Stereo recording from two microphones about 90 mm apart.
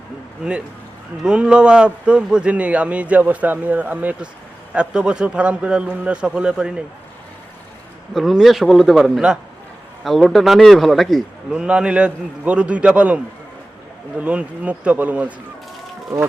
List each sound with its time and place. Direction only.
1.2 s speech: 10° right (ahead or behind)
8.1 s a man's voice: centre (ahead or behind)
11.5 s speech: 10° right (ahead or behind)
14.2 s speech: 15° right (ahead or behind)